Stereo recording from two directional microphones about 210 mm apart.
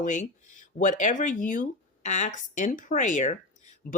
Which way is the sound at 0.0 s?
35° left (ahead or behind).